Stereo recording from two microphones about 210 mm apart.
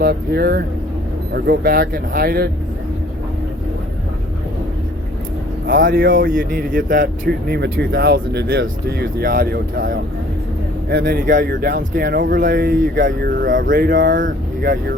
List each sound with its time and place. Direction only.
0.0 s speech: 45° right (ahead or behind)
5.6 s speech: 45° right (ahead or behind)